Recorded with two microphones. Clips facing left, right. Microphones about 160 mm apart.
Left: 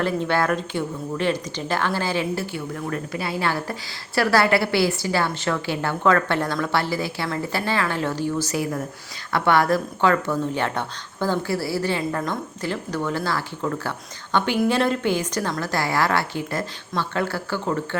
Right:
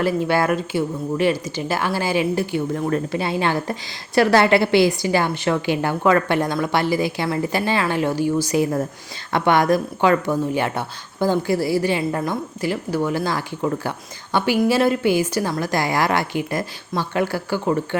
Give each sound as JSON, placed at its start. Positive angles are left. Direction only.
{"t": 0.0, "sound": "speech", "side_deg": -10}
{"t": 2.7, "sound": "speech", "side_deg": -30}
{"t": 14.3, "sound": "speech", "side_deg": -5}